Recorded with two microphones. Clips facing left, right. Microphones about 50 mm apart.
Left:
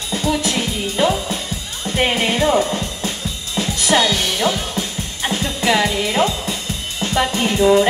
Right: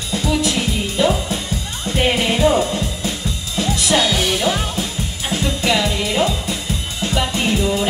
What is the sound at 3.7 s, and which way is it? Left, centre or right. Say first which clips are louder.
Music: left 1 dB; left.